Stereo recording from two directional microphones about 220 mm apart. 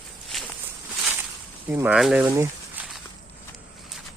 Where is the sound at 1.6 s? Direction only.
5° right (ahead or behind).